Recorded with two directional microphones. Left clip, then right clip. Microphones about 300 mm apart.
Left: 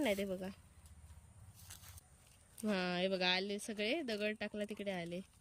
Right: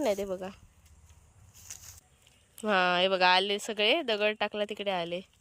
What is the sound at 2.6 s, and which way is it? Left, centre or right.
Speech, centre.